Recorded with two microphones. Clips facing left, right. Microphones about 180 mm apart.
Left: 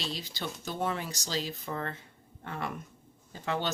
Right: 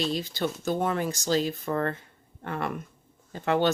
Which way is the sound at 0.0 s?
50° right (ahead or behind).